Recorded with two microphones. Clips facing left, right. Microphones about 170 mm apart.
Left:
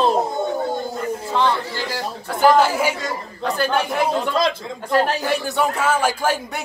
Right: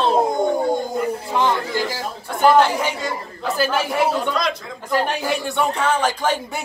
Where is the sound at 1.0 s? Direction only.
15° right (ahead or behind).